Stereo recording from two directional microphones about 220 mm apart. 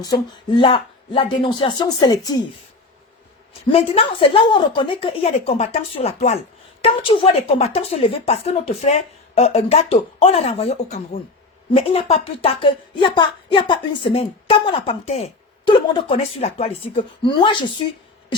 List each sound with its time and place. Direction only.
0.0 s speech: 20° left (ahead or behind)
3.7 s speech: 25° left (ahead or behind)